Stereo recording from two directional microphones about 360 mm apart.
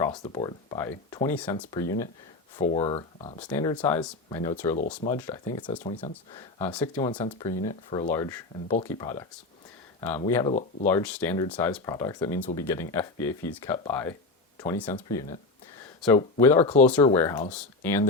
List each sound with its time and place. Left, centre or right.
0.0 s speech: centre